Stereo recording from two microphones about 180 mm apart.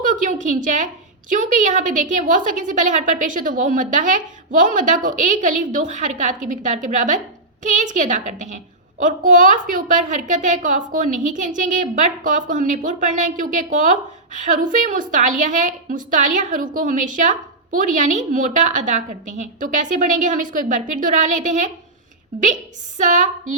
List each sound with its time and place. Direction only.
0.0 s a woman's voice: 45° right (ahead or behind)
23.0 s a woman's voice: 45° right (ahead or behind)